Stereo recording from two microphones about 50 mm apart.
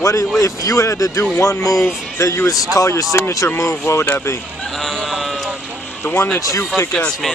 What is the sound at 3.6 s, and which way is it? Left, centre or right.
Speech, left.